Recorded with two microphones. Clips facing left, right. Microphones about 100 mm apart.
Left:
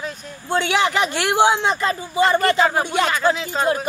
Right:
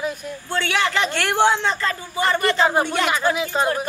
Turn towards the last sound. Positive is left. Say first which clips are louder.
# left 1 dB
turn(degrees=-15)  # may be behind; listen again after turning